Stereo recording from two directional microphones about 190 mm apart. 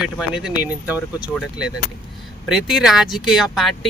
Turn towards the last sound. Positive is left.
turn(degrees=0)  # may be behind; listen again after turning